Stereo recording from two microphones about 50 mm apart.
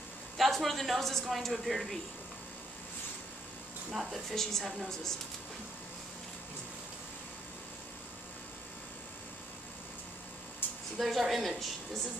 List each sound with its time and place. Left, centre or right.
0.4 s a man's voice: centre
3.9 s speech: centre
4.3 s a woman's voice: centre
10.6 s a sound: left
11.0 s speech: centre